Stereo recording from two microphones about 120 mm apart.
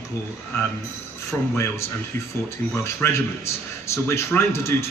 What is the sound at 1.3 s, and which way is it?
Speech, 25° left (ahead or behind).